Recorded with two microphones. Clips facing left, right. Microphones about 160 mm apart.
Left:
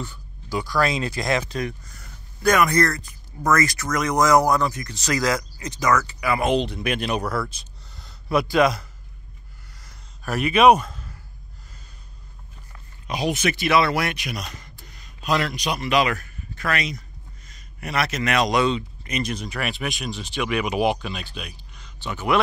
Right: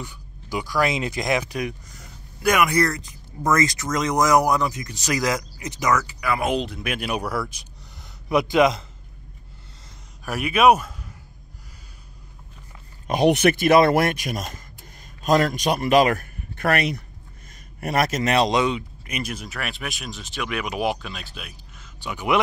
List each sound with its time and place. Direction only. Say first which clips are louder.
0.0 s speech: left 2 dB; 15° right (ahead or behind)
6.2 s speech: left 4 dB; centre (ahead or behind); by 8.8 s 20° right (ahead or behind)
10.2 s speech: left 1 dB; 10° right (ahead or behind)
13.0 s speech: right 6 dB; 55° right (ahead or behind)
17.7 s a man's voice: right 3 dB; 45° right (ahead or behind)
18.5 s speech: left 1 dB; 15° right (ahead or behind)